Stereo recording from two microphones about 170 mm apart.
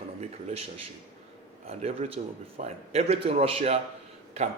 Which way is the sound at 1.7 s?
35° right (ahead or behind).